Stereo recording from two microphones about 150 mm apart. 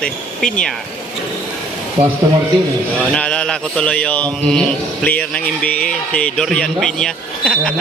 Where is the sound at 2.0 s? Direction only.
45° right (ahead or behind).